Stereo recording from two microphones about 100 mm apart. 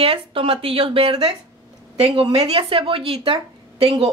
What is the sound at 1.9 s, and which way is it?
Speech, 90° right.